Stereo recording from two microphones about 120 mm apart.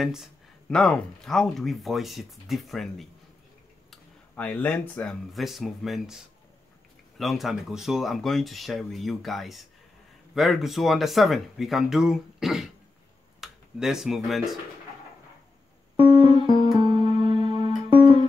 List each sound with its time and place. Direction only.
0.0 s speech: 5° right (ahead or behind)
4.4 s speech: 15° left (ahead or behind)
5.3 s speech: centre (ahead or behind)
7.2 s speech: centre (ahead or behind)
16.0 s music: 40° right (ahead or behind)